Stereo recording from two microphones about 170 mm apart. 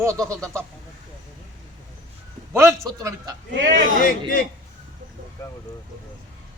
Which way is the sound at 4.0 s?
55° left (ahead or behind).